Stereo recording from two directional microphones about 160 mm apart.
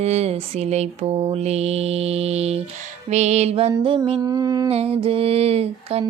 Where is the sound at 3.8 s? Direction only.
35° right (ahead or behind).